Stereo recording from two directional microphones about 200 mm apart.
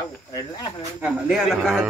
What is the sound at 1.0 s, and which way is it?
Speech, 5° right (ahead or behind).